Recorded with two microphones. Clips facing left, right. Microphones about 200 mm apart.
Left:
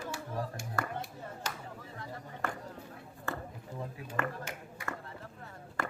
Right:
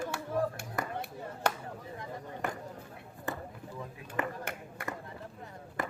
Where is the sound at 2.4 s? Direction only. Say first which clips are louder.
Even; 15° right (ahead or behind).